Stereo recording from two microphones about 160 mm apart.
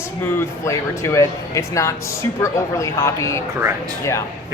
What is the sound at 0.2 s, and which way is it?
Speech, 15° left (ahead or behind).